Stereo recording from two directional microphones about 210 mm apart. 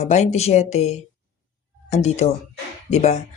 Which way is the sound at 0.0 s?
30° left (ahead or behind).